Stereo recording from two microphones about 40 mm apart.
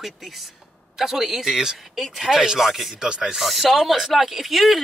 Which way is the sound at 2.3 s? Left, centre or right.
Centre.